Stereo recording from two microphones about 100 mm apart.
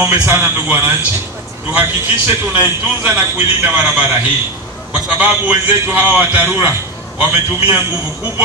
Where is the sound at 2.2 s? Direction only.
20° right (ahead or behind).